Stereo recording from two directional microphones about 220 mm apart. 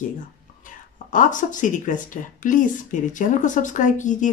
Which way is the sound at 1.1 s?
35° left (ahead or behind).